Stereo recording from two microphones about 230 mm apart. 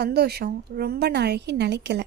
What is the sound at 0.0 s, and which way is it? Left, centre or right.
A woman's voice, right.